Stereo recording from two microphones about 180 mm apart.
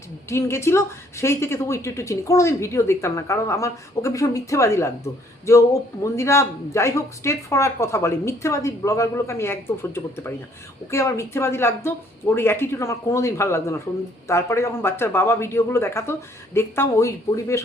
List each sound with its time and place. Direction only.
0.3 s a woman's voice: 15° left (ahead or behind)